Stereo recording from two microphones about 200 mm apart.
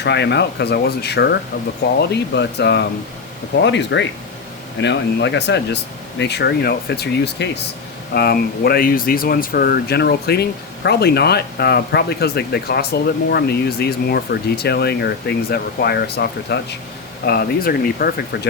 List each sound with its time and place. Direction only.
0.0 s speech: 60° left (ahead or behind)